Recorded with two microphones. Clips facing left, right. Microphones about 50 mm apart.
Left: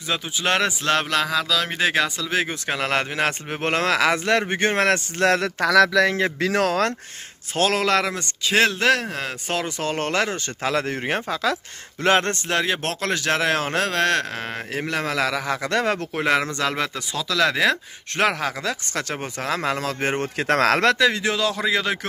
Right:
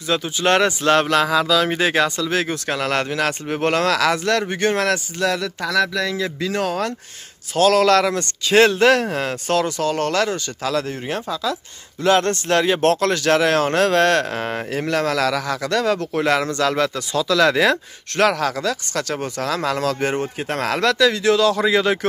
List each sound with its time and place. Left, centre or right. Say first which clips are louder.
0.1 s speech: right 5 dB; centre; by 5.0 s left
5.2 s speech: left 4 dB; left
5.7 s speech: left 4 dB; left
7.5 s speech: right 6 dB; left
7.8 s speech: right 5 dB; centre
9.5 s speech: right 6 dB; centre; by 12.1 s left
12.4 s speech: right 7 dB; centre
14.8 s speech: right 4 dB; centre; by 16.1 s left
16.1 s speech: right 2 dB; centre
17.2 s speech: right 4 dB; centre
18.1 s speech: right 4 dB; centre
20.2 s speech: left 3 dB; left
20.8 s speech: right 2 dB; left; by 21.6 s centre
21.6 s speech: right 5 dB; centre